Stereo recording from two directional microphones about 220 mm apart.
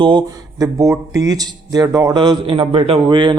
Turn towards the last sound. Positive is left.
turn(degrees=-20)  # may be behind; listen again after turning